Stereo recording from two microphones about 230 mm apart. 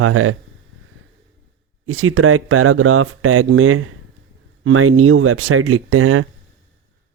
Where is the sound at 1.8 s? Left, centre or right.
Right.